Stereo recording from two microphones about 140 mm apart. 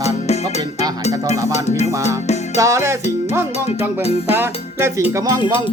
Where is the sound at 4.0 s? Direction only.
50° left (ahead or behind).